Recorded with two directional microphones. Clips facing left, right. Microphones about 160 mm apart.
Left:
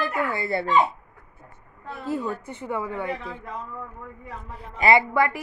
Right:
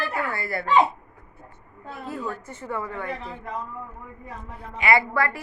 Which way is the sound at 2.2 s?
15° left (ahead or behind).